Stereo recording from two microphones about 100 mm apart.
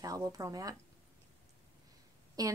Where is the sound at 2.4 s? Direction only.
40° right (ahead or behind).